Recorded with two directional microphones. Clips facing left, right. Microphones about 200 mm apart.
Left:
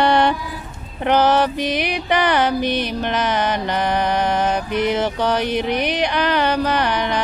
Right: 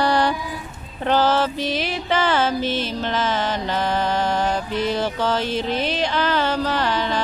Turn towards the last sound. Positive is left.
turn(degrees=20)  # may be behind; listen again after turning